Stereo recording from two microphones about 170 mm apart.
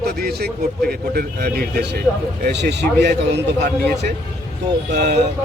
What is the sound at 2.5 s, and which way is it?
Speech, 85° right.